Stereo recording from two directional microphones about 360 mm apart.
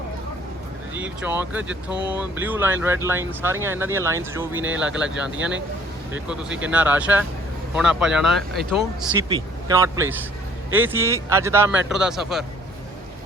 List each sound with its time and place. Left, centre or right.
0.9 s a man's voice: centre